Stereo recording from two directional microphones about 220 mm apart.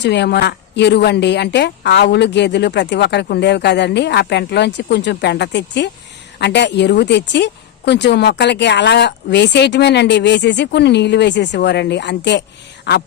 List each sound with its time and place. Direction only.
0.0 s a woman's voice: 50° left (ahead or behind)